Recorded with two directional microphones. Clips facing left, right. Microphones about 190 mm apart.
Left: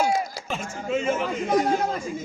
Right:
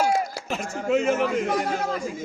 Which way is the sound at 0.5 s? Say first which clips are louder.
Right 4 dB; 70° right (ahead or behind).